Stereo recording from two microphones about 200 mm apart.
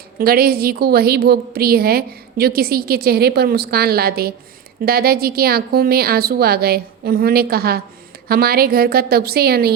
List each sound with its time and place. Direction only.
0.2 s a woman's voice: 50° right (ahead or behind)